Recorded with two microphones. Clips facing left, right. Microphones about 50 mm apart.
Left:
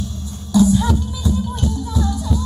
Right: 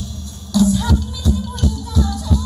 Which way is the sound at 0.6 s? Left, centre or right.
Centre.